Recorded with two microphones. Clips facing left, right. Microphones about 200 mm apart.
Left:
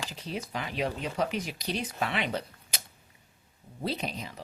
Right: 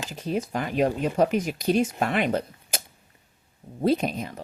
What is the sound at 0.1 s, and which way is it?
Speech, 50° right (ahead or behind).